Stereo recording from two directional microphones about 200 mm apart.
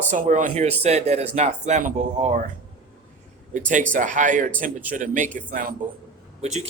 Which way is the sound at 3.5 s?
40° right (ahead or behind).